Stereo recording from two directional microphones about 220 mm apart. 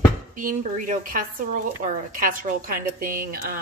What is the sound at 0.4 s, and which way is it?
Speech, 35° right (ahead or behind).